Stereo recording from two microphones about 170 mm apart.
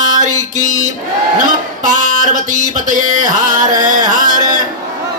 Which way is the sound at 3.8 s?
50° right (ahead or behind).